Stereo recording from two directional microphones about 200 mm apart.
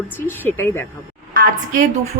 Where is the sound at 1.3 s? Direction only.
40° right (ahead or behind).